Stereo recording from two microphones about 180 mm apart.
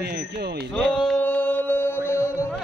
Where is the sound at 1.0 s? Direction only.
10° left (ahead or behind).